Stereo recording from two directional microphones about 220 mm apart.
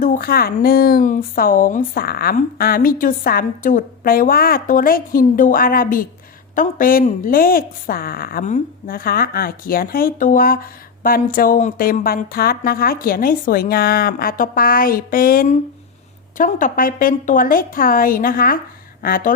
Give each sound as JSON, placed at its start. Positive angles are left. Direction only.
{"t": 0.0, "sound": "a woman's voice", "side_deg": 40}